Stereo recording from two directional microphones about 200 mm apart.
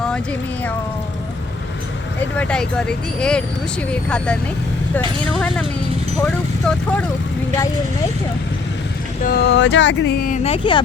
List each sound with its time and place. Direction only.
2.4 s speech: 5° left (ahead or behind)
9.2 s speech: 50° left (ahead or behind); by 10.8 s 25° left (ahead or behind)